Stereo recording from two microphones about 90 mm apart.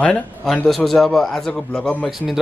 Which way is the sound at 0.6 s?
Centre (ahead or behind).